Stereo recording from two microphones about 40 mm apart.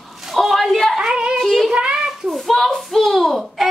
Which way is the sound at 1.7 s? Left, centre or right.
Right.